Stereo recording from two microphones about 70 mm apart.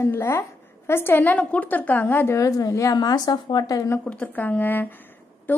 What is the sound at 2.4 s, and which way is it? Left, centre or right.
Speech, left.